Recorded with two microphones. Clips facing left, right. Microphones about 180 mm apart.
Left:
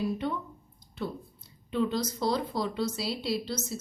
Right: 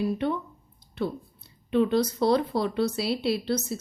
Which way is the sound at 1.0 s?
60° right (ahead or behind).